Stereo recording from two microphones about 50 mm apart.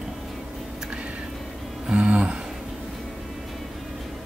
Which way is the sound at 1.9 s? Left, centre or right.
Right.